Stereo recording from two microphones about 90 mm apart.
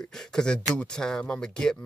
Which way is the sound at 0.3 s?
5° left (ahead or behind).